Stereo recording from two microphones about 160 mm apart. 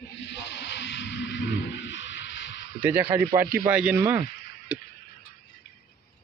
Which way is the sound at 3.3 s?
65° right (ahead or behind).